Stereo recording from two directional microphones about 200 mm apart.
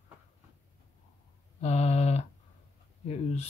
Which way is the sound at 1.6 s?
35° left (ahead or behind).